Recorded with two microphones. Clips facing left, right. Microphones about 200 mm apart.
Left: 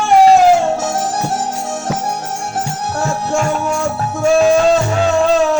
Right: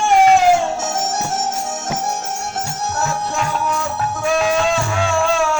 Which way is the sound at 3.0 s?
50° left (ahead or behind).